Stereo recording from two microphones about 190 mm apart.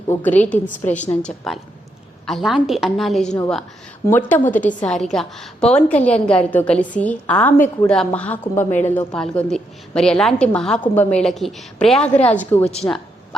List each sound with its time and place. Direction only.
0.1 s a woman's voice: 10° left (ahead or behind)